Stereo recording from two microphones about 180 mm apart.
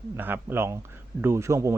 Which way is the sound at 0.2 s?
10° right (ahead or behind).